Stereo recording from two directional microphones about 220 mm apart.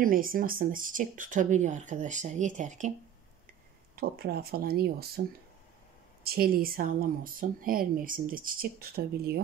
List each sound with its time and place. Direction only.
0.0 s speech: 40° right (ahead or behind)
3.9 s speech: 45° right (ahead or behind)
6.2 s speech: 45° right (ahead or behind)